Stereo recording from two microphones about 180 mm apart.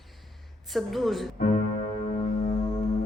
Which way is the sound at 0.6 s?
Centre (ahead or behind).